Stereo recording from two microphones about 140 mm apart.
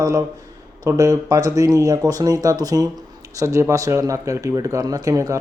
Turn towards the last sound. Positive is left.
turn(degrees=-25)  # may be behind; listen again after turning